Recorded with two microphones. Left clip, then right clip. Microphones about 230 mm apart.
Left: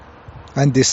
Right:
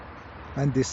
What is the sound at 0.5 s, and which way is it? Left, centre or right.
Speech, left.